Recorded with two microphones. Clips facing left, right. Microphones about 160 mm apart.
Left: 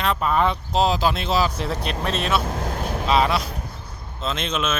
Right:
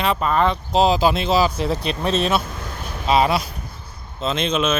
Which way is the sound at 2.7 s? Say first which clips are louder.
Left 5 dB; 50° left (ahead or behind).